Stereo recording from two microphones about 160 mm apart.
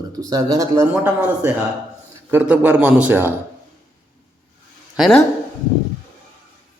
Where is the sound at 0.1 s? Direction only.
20° right (ahead or behind).